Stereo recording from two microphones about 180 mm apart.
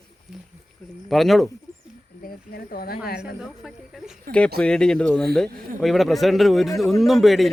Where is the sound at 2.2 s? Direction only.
60° left (ahead or behind).